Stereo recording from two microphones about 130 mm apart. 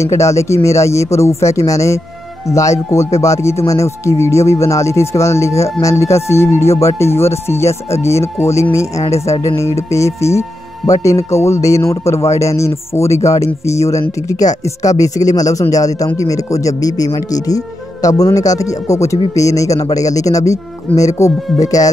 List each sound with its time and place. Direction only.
0.0 s speech: 25° left (ahead or behind)
14.5 s speech: 70° left (ahead or behind)
14.8 s speech: 25° left (ahead or behind)